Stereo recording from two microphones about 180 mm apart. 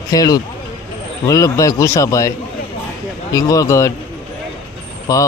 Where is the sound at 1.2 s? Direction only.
20° left (ahead or behind).